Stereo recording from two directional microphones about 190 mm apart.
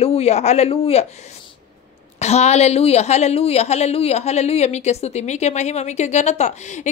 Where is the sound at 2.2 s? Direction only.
35° left (ahead or behind).